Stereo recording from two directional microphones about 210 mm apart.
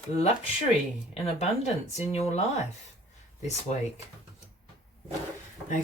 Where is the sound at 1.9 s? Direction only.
30° left (ahead or behind).